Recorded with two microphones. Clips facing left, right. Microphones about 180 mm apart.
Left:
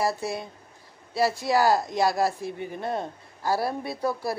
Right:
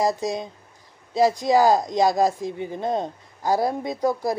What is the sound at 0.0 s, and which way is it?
Speech, 15° right (ahead or behind).